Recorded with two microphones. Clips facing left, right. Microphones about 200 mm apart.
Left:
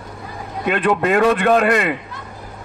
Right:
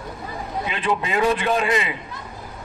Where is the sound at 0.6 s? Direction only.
65° left (ahead or behind).